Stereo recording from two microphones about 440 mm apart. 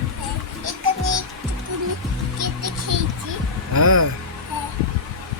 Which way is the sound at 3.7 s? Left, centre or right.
Right.